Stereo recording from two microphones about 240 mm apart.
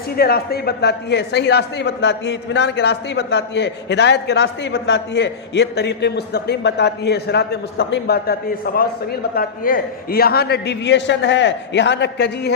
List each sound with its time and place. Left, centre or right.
0.2 s speech: left